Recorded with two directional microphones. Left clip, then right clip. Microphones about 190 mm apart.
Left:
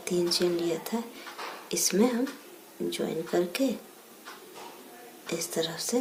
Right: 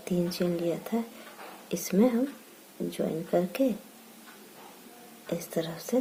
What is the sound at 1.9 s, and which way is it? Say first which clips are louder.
Speech: right 1 dB; 40° right (ahead or behind).